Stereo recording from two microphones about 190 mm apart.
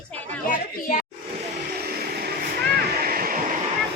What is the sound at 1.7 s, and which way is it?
Vehicle, 55° right (ahead or behind).